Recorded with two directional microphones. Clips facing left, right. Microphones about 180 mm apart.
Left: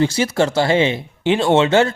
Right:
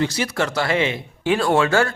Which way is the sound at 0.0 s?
30° left (ahead or behind).